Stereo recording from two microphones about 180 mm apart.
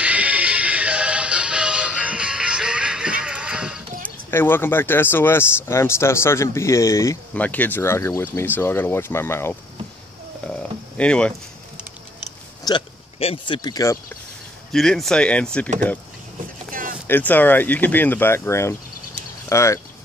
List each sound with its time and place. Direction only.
0.0 s music: 5° right (ahead or behind)
4.0 s speech: 10° left (ahead or behind)
10.4 s a sound: 5° left (ahead or behind)
12.6 s speech: 30° left (ahead or behind)
14.7 s speech: centre (ahead or behind)
17.1 s speech: 10° left (ahead or behind)